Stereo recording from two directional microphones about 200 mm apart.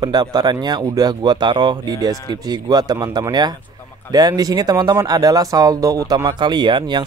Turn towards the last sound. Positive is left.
turn(degrees=-25)  # may be behind; listen again after turning